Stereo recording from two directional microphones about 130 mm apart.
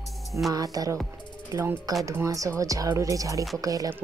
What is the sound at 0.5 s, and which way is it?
Speech, 30° right (ahead or behind).